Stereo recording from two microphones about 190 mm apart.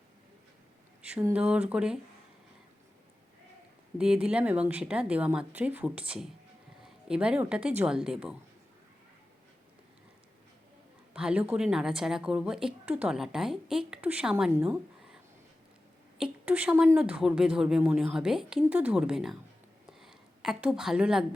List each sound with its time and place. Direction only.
1.0 s a woman's voice: 5° right (ahead or behind)
3.9 s a woman's voice: 5° right (ahead or behind)
11.1 s a woman's voice: 5° right (ahead or behind)
14.5 s a sound: 5° right (ahead or behind)
16.1 s a woman's voice: 5° right (ahead or behind)
19.9 s a sound: centre (ahead or behind)